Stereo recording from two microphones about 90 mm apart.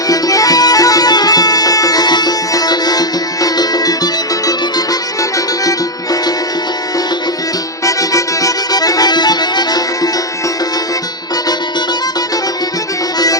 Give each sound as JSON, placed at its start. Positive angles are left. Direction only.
{"t": 0.1, "sound": "music", "side_deg": 40}
{"t": 7.9, "sound": "accordion", "side_deg": 40}